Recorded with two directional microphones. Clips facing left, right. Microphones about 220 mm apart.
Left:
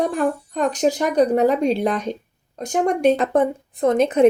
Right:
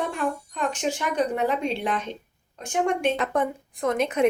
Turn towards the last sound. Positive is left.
turn(degrees=35)  # may be behind; listen again after turning